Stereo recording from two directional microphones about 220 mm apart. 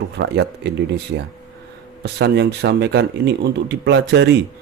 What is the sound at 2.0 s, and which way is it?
Speech, 50° right (ahead or behind).